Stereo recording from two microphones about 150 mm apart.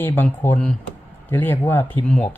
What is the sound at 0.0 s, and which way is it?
Speech, 15° left (ahead or behind).